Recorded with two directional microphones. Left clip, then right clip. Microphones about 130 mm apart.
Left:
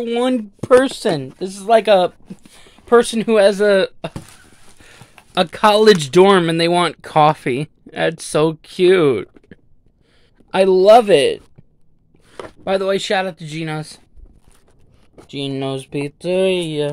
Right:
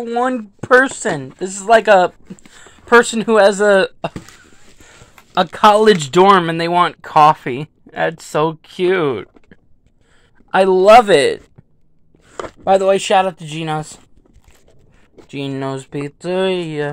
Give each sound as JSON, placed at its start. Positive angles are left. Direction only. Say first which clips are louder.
{"t": 0.1, "sound": "speech", "louder": "right 1 dB", "side_deg": 45}
{"t": 0.6, "sound": "speech", "louder": "right 1 dB", "side_deg": 25}
{"t": 1.3, "sound": "speech", "louder": "right 3 dB", "side_deg": 0}
{"t": 4.8, "sound": "a sound", "louder": "even", "side_deg": 35}
{"t": 5.6, "sound": "speech", "louder": "right 1 dB", "side_deg": 30}
{"t": 6.7, "sound": "speech", "louder": "right 3 dB", "side_deg": 60}
{"t": 10.5, "sound": "speech", "louder": "right 2 dB", "side_deg": 25}
{"t": 12.6, "sound": "speech", "louder": "right 5 dB", "side_deg": 0}
{"t": 16.2, "sound": "speech", "louder": "left 1 dB", "side_deg": 15}